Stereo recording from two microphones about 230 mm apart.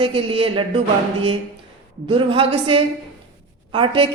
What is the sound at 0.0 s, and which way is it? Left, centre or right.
Speech, right.